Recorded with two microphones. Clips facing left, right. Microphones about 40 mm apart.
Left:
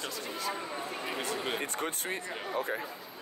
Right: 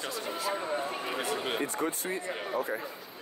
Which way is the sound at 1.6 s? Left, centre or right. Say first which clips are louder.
Right 3 dB; left.